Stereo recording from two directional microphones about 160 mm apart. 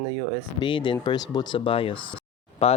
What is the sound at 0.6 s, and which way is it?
Speech, 30° left (ahead or behind).